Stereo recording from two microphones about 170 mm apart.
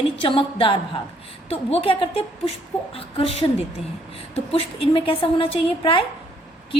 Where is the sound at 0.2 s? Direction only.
30° left (ahead or behind).